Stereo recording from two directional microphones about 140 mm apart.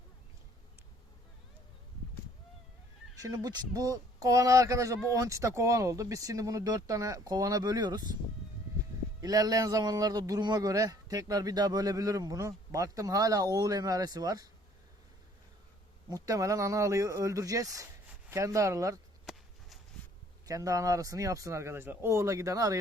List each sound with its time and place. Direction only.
3.2 s a man's voice: 25° right (ahead or behind)
9.2 s a man's voice: 25° right (ahead or behind)
16.0 s a man's voice: 25° right (ahead or behind)
19.2 s a sound: centre (ahead or behind)
20.5 s a man's voice: 25° right (ahead or behind)